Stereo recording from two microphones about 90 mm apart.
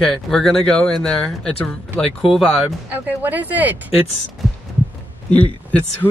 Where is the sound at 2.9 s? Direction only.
20° right (ahead or behind).